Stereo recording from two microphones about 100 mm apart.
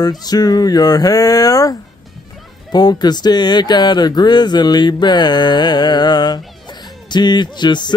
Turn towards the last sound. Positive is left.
turn(degrees=50)  # may be behind; listen again after turning